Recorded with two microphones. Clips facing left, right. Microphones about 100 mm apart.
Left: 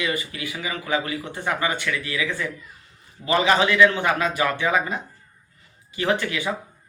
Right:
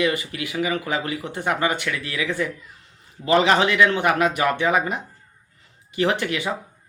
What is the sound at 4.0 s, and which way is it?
Speech, 15° right (ahead or behind).